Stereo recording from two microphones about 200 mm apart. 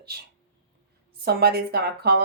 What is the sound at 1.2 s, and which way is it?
Speech, 50° right (ahead or behind).